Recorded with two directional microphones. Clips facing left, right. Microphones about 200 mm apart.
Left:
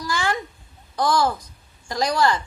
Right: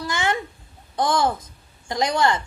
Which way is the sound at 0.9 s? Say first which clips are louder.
Even; 25° right (ahead or behind).